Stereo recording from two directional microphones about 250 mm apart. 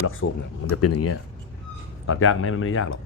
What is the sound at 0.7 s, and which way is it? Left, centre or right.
Speech, left.